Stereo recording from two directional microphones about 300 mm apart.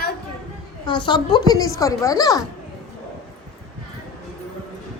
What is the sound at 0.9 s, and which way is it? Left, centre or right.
A woman's voice, centre.